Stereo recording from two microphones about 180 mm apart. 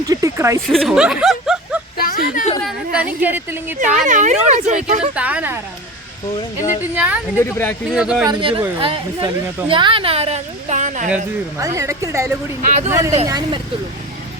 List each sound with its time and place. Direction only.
0.0 s a sound: 20° right (ahead or behind)
0.7 s speech: centre (ahead or behind)
2.0 s a sound: 50° left (ahead or behind)
3.0 s a woman's voice: 10° right (ahead or behind)
3.8 s a woman's voice: 45° right (ahead or behind)
5.1 s a woman's voice: 5° right (ahead or behind)
6.9 s a woman's voice: 10° right (ahead or behind)
7.3 s speech: 10° left (ahead or behind)
7.9 s speech: 5° right (ahead or behind)
8.2 s a woman's voice: 25° right (ahead or behind); by 11.1 s 45° right (ahead or behind)
11.5 s a woman's voice: 15° right (ahead or behind)
12.6 s speech: 40° right (ahead or behind)
12.9 s a woman's voice: 15° right (ahead or behind)